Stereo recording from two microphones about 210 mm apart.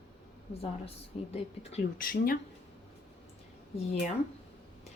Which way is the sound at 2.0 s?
45° left (ahead or behind).